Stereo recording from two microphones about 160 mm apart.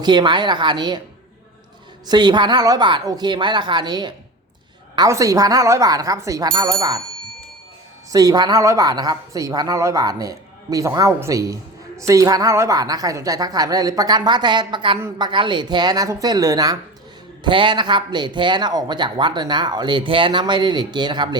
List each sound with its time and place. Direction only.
0.0 s a woman's voice: 25° right (ahead or behind)
2.0 s a woman's voice: 25° right (ahead or behind)
8.1 s a woman's voice: 20° right (ahead or behind)